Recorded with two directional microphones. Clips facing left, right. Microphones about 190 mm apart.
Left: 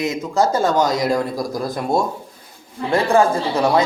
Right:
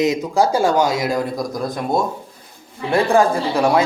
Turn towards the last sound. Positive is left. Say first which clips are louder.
# even
turn(degrees=-15)  # may be behind; listen again after turning